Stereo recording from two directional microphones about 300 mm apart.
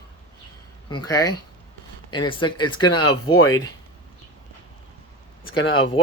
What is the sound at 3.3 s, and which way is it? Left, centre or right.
Speech, left.